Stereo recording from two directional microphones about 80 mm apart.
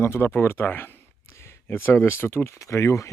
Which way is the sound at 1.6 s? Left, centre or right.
Left.